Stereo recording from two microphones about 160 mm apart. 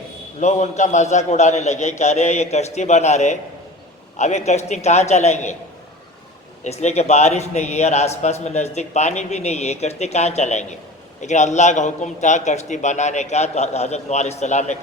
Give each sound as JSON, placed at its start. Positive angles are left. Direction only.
{"t": 0.3, "sound": "a man's voice", "side_deg": 45}
{"t": 6.7, "sound": "a man's voice", "side_deg": 45}